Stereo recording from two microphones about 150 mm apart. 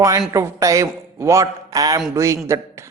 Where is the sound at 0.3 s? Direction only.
20° right (ahead or behind).